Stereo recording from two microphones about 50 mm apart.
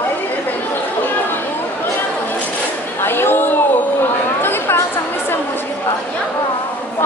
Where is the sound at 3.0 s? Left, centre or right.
Left.